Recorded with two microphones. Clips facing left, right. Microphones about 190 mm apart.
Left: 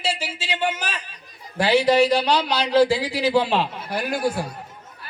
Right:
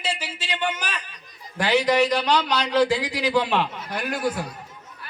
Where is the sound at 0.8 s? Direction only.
30° left (ahead or behind).